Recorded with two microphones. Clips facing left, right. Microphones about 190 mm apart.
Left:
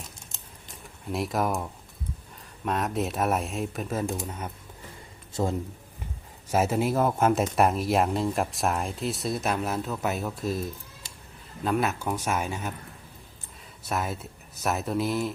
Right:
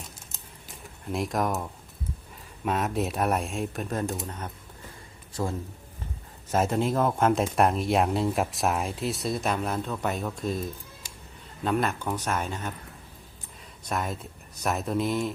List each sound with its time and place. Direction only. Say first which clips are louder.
1.0 s speech: even; centre (ahead or behind)
5.3 s a man's voice: left 3 dB; 20° left (ahead or behind)
6.5 s speech: left 1 dB; 5° left (ahead or behind)
13.8 s speech: left 1 dB; 5° left (ahead or behind)